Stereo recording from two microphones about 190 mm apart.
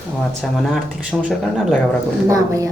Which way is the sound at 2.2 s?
15° right (ahead or behind).